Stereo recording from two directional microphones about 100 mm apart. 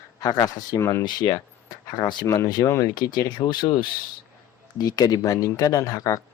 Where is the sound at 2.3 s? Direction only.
30° left (ahead or behind).